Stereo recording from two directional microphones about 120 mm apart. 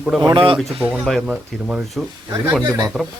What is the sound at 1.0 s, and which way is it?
Speech, centre (ahead or behind).